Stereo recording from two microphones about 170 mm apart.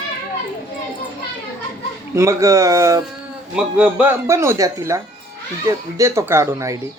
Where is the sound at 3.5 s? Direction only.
5° right (ahead or behind).